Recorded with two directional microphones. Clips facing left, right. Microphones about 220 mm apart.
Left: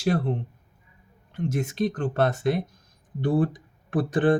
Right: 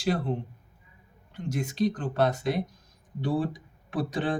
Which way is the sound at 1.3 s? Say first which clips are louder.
Left 4 dB; 50° left (ahead or behind).